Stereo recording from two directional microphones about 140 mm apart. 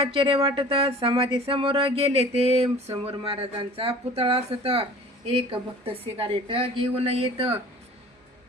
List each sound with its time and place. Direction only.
0.0 s speech: 40° right (ahead or behind)